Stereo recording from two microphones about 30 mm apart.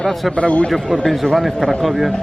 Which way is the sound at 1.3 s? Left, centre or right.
Centre.